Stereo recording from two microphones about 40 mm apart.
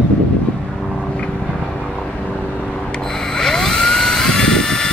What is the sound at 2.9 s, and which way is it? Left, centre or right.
Dental drill, centre.